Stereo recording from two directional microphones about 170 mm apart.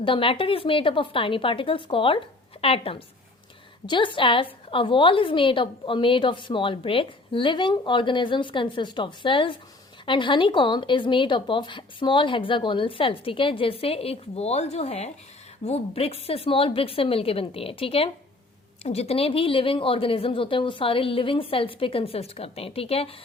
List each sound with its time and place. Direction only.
0.0 s a woman's voice: 30° left (ahead or behind)